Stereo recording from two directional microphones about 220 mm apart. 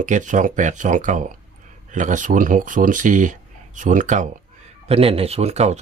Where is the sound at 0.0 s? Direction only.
35° right (ahead or behind).